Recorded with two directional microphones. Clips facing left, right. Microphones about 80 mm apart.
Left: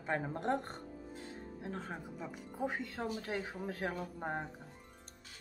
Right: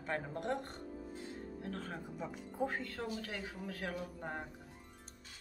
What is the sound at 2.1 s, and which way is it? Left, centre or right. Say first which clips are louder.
Speech: right 4 dB; centre.